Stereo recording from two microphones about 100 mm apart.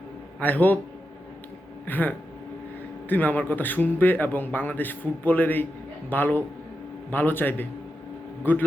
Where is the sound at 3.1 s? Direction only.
15° left (ahead or behind).